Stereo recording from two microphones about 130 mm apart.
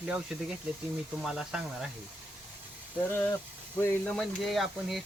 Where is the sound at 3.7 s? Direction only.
15° left (ahead or behind).